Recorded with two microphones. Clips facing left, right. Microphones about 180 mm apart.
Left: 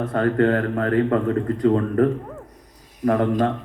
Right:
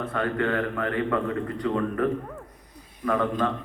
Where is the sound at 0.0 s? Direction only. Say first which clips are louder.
Left 7 dB; 45° left (ahead or behind).